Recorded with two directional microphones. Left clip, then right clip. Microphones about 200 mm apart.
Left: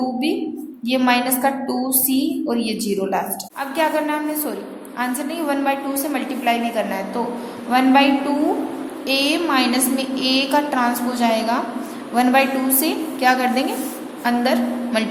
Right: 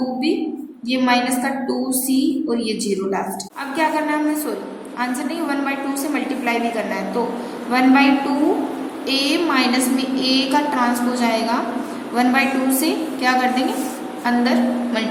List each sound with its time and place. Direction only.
0.9 s a woman's voice: 35° left (ahead or behind)
5.5 s a woman's voice: 35° left (ahead or behind)